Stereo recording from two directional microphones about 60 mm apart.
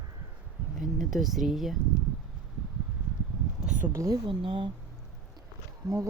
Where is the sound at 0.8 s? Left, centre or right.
Centre.